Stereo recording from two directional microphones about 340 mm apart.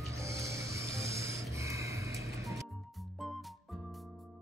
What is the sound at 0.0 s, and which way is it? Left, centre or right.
Music, centre.